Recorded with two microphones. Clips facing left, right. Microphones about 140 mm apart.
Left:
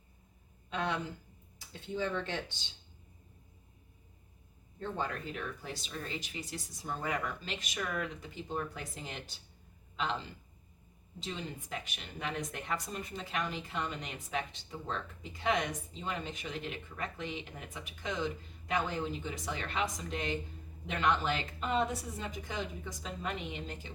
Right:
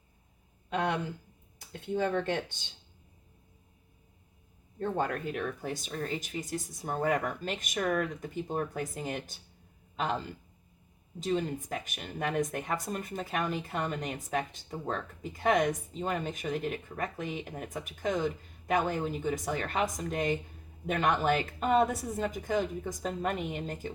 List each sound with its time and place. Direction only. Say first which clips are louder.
0.7 s speech: right 4 dB; 55° right (ahead or behind)
4.8 s speech: right 6 dB; 55° right (ahead or behind)